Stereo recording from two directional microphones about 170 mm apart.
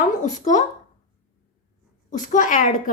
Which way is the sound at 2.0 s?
50° left (ahead or behind).